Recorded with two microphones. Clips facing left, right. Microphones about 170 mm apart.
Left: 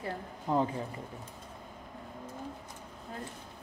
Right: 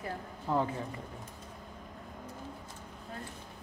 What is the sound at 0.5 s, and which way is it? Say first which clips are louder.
Speech: left 1 dB; 15° left (ahead or behind).